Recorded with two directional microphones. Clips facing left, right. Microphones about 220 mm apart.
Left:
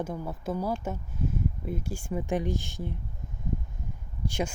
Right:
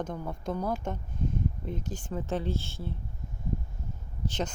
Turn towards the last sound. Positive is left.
turn(degrees=10)  # may be behind; listen again after turning